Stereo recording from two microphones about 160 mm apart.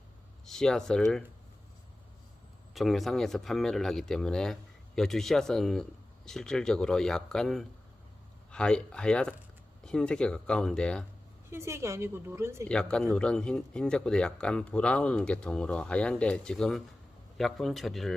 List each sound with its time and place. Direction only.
0.4 s speech: 5° left (ahead or behind)
2.7 s speech: centre (ahead or behind)
11.5 s a woman's voice: 15° right (ahead or behind)
12.6 s speech: 5° left (ahead or behind)